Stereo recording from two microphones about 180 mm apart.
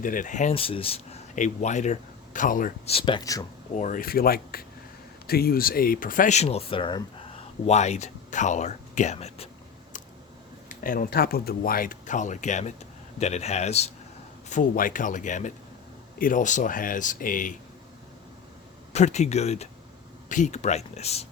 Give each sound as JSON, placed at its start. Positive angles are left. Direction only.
{"t": 0.0, "sound": "speech", "side_deg": 50}
{"t": 2.9, "sound": "speech", "side_deg": 25}
{"t": 3.8, "sound": "speech", "side_deg": 45}
{"t": 10.7, "sound": "speech", "side_deg": 50}
{"t": 14.5, "sound": "speech", "side_deg": 50}
{"t": 18.9, "sound": "speech", "side_deg": 40}